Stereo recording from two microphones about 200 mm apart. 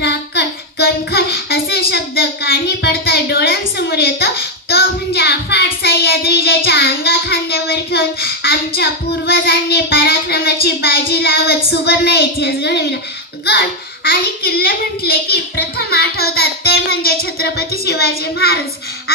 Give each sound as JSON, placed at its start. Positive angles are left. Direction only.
{"t": 0.0, "sound": "child singing", "side_deg": 55}
{"t": 13.5, "sound": "a child's voice", "side_deg": 50}